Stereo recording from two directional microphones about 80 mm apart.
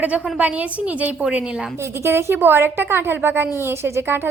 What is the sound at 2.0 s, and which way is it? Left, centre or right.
A woman's voice, right.